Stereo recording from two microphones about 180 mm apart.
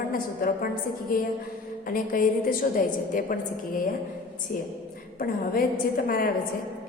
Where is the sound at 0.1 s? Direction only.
50° left (ahead or behind).